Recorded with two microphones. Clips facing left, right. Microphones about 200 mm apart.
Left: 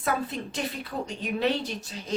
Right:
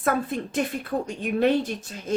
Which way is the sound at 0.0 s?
50° right (ahead or behind).